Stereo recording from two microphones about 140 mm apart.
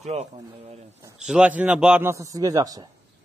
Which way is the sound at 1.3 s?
10° right (ahead or behind).